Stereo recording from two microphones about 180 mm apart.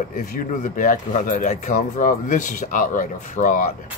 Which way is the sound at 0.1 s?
50° left (ahead or behind).